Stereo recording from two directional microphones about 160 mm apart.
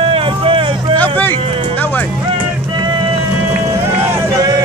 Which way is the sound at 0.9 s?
10° left (ahead or behind).